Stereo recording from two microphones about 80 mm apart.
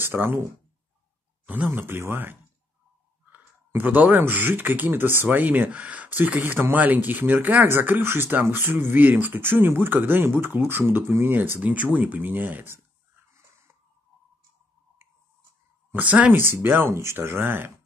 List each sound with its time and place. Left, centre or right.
0.0 s speech: right
1.4 s a sound: centre
1.7 s speech: right
15.9 s speech: centre